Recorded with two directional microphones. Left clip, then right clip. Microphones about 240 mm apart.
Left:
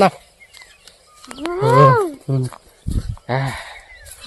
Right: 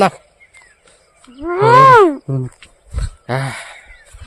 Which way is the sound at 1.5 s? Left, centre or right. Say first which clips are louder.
Right 6 dB; right.